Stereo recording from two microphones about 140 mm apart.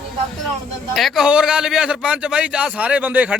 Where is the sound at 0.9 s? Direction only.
Centre (ahead or behind).